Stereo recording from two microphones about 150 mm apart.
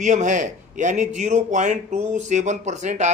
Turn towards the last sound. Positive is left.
turn(degrees=-50)  # may be behind; listen again after turning